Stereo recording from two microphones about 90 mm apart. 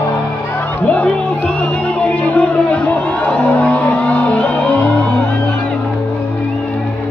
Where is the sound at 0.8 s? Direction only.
15° left (ahead or behind).